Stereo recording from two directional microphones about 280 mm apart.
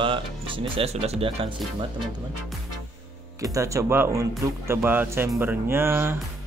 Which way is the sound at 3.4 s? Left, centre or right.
Centre.